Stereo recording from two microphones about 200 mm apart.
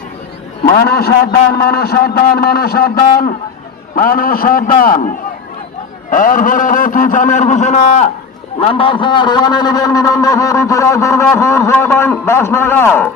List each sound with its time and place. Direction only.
0.6 s a man's voice: 50° left (ahead or behind)
6.1 s a man's voice: 40° left (ahead or behind); by 13.1 s 10° left (ahead or behind)